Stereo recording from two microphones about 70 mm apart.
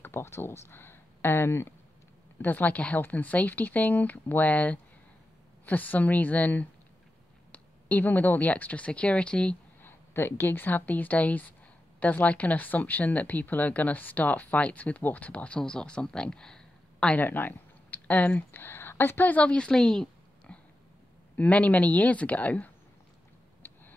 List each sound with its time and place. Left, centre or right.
0.0 s speech: left
2.4 s speech: left
9.8 s speech: left; by 17.2 s centre
17.2 s speech: left